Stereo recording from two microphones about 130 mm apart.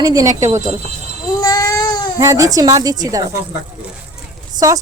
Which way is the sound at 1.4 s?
30° left (ahead or behind).